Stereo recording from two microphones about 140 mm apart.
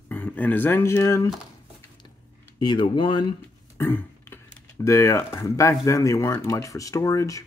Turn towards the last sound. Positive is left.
turn(degrees=25)  # may be behind; listen again after turning